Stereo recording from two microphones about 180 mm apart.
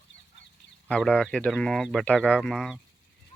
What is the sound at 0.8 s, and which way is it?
Speech, 5° left (ahead or behind).